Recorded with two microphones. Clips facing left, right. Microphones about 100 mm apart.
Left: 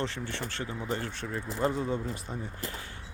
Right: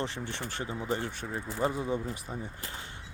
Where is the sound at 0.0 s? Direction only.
15° right (ahead or behind).